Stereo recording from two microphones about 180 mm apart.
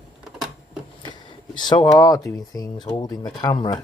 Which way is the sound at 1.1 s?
25° left (ahead or behind).